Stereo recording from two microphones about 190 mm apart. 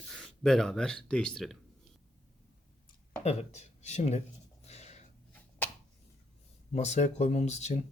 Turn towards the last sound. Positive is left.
turn(degrees=35)  # may be behind; listen again after turning